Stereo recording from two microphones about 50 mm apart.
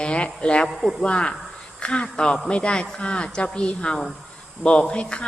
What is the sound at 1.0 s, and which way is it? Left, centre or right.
Speech, centre.